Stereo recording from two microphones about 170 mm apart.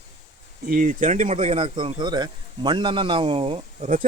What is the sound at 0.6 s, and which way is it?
Speech, 55° right (ahead or behind).